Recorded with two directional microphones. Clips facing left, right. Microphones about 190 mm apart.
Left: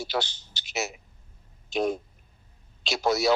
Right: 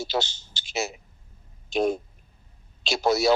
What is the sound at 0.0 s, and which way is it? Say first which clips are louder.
A man's voice: right 2 dB; 25° right (ahead or behind).